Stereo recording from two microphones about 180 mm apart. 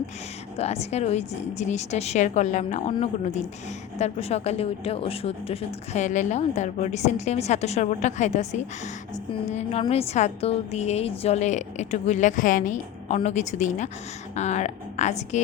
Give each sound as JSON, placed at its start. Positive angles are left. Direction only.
{"t": 0.5, "sound": "a woman's voice", "side_deg": 35}